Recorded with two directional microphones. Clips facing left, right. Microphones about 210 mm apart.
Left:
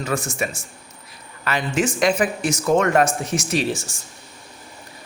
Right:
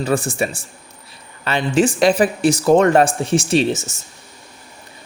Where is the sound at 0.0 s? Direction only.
30° right (ahead or behind).